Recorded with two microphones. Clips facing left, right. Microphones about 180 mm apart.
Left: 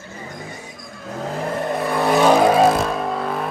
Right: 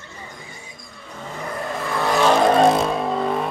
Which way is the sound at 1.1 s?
90° left.